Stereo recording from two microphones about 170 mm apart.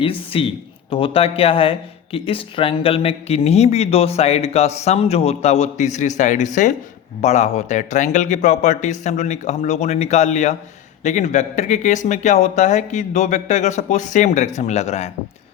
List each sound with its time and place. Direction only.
0.0 s speech: 35° left (ahead or behind)